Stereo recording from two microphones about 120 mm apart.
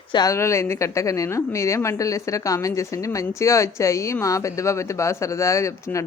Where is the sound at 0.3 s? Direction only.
25° left (ahead or behind).